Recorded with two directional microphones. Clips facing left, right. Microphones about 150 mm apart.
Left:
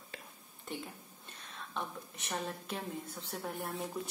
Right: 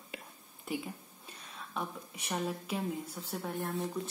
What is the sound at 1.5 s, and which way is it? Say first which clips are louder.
A woman's voice: right 2 dB; 5° right (ahead or behind).